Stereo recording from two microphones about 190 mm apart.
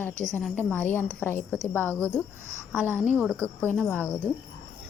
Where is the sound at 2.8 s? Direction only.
10° right (ahead or behind).